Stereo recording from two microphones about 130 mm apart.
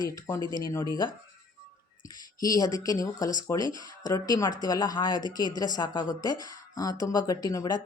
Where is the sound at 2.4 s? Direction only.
30° left (ahead or behind).